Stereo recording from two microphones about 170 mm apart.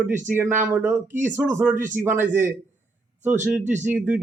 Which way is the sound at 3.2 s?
10° right (ahead or behind).